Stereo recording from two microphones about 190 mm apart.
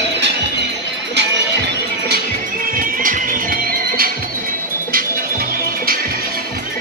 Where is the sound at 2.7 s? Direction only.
45° right (ahead or behind).